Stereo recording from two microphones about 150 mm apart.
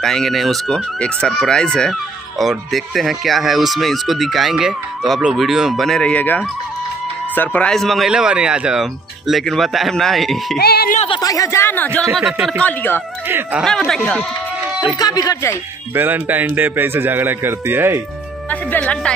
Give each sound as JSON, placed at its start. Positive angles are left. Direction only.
{"t": 0.0, "sound": "speech", "side_deg": 0}
{"t": 10.6, "sound": "speech", "side_deg": 90}
{"t": 11.1, "sound": "speech", "side_deg": 25}
{"t": 12.5, "sound": "speech", "side_deg": 10}
{"t": 13.3, "sound": "a man's voice", "side_deg": -10}
{"t": 13.7, "sound": "speech", "side_deg": 5}
{"t": 15.0, "sound": "speech", "side_deg": 25}
{"t": 15.9, "sound": "a man's voice", "side_deg": -15}
{"t": 18.5, "sound": "speech", "side_deg": 10}